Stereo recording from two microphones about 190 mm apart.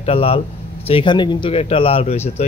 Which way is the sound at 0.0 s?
30° left (ahead or behind).